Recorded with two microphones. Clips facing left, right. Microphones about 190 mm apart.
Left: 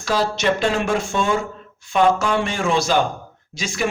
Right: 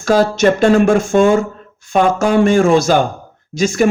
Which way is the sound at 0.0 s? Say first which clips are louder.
Right 8 dB; 45° right (ahead or behind).